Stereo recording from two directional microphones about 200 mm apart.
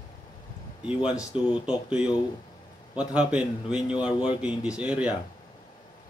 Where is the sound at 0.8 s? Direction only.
5° right (ahead or behind).